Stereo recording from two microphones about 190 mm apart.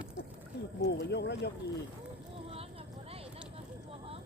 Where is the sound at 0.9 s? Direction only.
65° left (ahead or behind).